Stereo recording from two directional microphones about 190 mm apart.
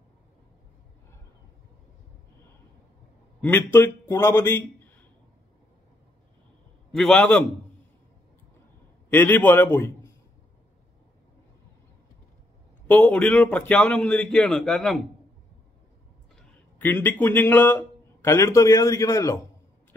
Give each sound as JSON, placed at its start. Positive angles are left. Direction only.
{"t": 3.3, "sound": "a man's voice", "side_deg": 10}
{"t": 7.0, "sound": "a man's voice", "side_deg": 5}
{"t": 9.1, "sound": "a man's voice", "side_deg": 10}
{"t": 12.8, "sound": "a man's voice", "side_deg": 5}
{"t": 16.3, "sound": "a man's voice", "side_deg": 10}